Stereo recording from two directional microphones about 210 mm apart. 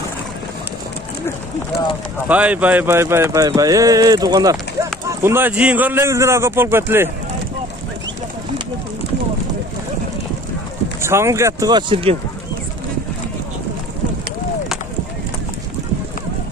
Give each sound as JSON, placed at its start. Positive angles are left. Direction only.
{"t": 2.2, "sound": "speech", "side_deg": -5}
{"t": 11.0, "sound": "speech", "side_deg": -10}